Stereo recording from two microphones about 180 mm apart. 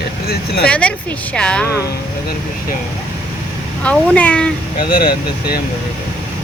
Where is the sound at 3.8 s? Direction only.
5° left (ahead or behind).